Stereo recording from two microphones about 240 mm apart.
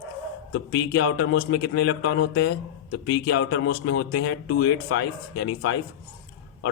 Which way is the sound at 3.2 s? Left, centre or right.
Left.